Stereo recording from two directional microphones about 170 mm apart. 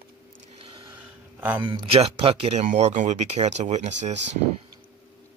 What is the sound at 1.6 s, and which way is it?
Speech, 30° right (ahead or behind).